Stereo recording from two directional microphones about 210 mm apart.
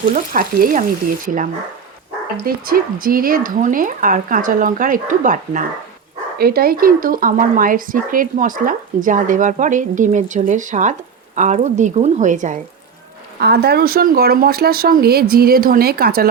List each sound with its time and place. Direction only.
0.1 s speech: 40° right (ahead or behind)
2.5 s speech: 45° right (ahead or behind)
13.4 s speech: 50° right (ahead or behind)